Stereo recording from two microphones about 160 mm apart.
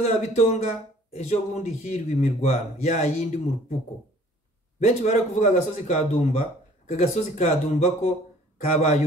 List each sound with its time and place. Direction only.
0.0 s speech: 45° left (ahead or behind)
4.7 s speech: 45° left (ahead or behind)